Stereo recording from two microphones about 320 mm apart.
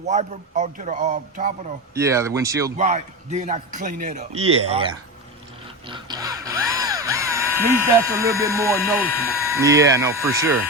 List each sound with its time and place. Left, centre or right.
0.0 s a man's voice: right
2.0 s speech: centre
2.7 s a man's voice: right
5.9 s music: centre
7.8 s speech: centre